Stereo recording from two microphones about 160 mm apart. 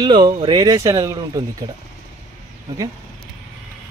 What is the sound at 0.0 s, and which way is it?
Speech, 25° right (ahead or behind).